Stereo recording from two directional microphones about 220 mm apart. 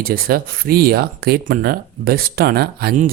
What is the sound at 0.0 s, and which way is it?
Speech, 40° right (ahead or behind).